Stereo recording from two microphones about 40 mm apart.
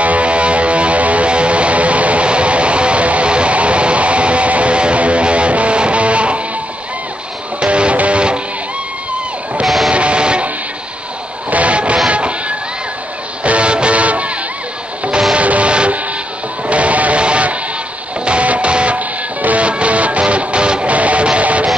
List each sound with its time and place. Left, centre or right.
0.0 s music: right
7.6 s music: right
9.8 s music: right
11.5 s music: right
15.3 s music: right
18.9 s music: right
20.9 s music: right